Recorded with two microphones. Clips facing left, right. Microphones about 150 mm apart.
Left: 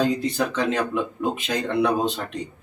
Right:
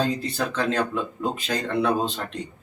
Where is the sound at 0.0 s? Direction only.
15° left (ahead or behind).